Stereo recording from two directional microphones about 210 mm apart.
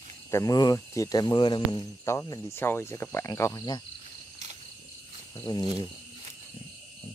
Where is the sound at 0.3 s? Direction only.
15° left (ahead or behind).